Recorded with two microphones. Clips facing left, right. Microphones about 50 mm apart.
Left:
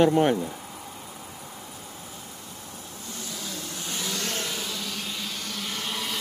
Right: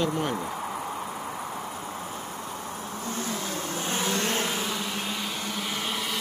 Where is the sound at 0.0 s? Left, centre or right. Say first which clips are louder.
Left 7 dB; left.